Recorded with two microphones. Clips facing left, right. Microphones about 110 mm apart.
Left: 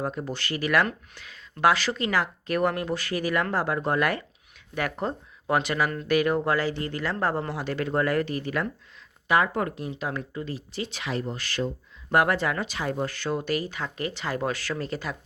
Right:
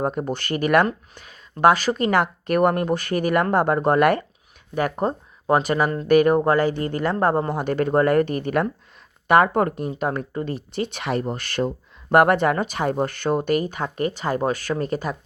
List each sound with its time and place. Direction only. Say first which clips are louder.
0.0 s speech: right 6 dB; 55° right (ahead or behind)
4.7 s speech: right 6 dB; 40° right (ahead or behind)